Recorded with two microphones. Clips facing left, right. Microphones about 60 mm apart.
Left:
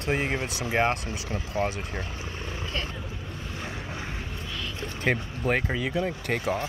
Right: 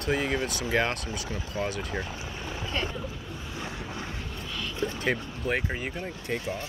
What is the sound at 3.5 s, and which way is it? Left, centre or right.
Ocean, centre.